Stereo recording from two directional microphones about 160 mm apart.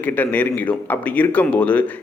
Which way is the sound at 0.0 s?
10° left (ahead or behind).